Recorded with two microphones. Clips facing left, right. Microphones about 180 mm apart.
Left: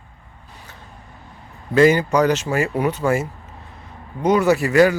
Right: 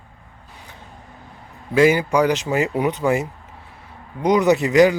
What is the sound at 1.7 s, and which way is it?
A man's voice, 10° right (ahead or behind).